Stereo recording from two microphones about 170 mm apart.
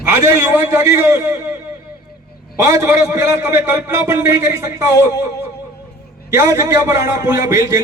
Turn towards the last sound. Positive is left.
turn(degrees=-15)  # may be behind; listen again after turning